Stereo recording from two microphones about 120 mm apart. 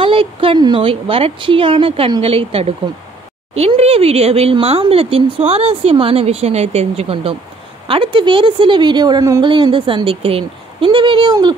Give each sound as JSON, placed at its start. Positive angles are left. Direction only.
{"t": 0.0, "sound": "a woman's voice", "side_deg": -50}
{"t": 9.4, "sound": "a woman's voice", "side_deg": -45}